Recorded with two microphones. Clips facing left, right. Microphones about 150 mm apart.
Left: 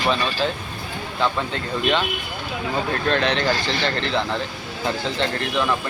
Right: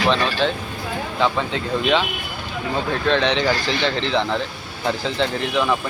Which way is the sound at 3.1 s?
Centre (ahead or behind).